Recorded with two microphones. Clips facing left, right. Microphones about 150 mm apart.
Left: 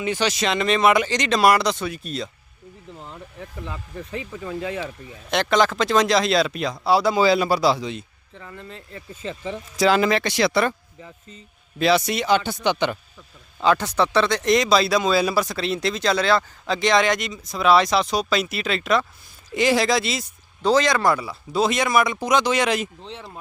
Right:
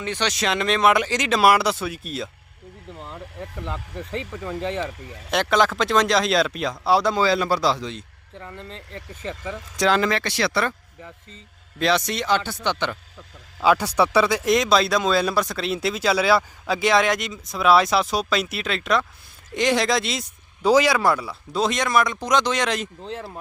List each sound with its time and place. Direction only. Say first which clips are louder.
0.0 s speech: left 2 dB; 5° left (ahead or behind)
3.4 s speech: right 2 dB; centre (ahead or behind)
9.2 s speech: left 2 dB; 20° left (ahead or behind)
9.7 s speech: left 2 dB; 5° left (ahead or behind)
13.6 s speech: right 1 dB; 10° right (ahead or behind)
20.7 s speech: right 1 dB; 10° right (ahead or behind)